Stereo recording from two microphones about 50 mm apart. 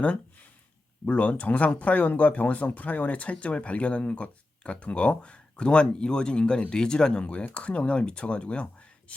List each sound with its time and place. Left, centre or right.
1.0 s speech: left
9.1 s whispering: left